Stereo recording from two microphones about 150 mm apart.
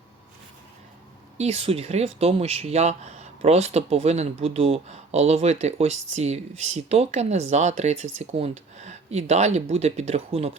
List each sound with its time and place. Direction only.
1.4 s speech: 40° right (ahead or behind)